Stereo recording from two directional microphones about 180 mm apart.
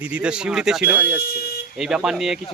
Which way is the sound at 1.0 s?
60° left (ahead or behind).